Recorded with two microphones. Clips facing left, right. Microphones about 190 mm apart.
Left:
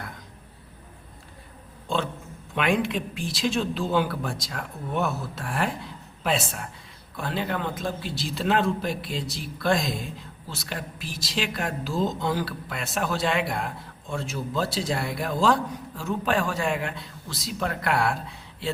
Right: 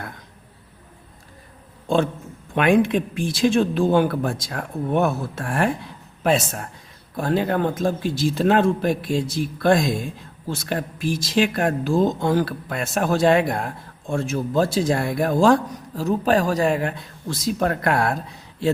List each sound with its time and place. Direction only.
2.6 s speech: 50° right (ahead or behind)